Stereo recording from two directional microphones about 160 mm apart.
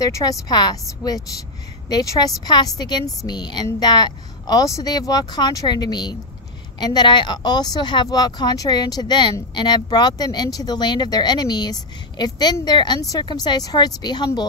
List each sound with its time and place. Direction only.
0.0 s speech: 20° left (ahead or behind)